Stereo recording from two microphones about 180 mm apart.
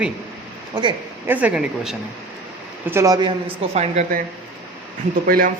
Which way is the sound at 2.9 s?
15° right (ahead or behind).